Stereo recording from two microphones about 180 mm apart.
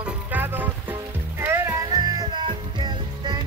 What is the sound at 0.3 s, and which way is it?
Music, 10° right (ahead or behind).